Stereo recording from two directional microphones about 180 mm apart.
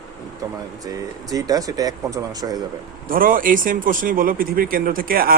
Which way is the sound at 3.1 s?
50° right (ahead or behind).